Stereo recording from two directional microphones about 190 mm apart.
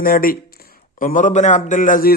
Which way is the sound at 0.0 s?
50° left (ahead or behind).